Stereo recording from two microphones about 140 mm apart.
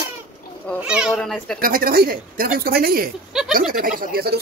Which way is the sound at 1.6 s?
90° right.